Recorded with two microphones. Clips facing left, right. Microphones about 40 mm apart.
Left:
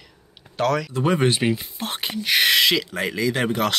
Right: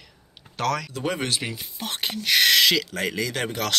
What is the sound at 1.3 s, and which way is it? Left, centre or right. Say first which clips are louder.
Speech: left 8 dB; left.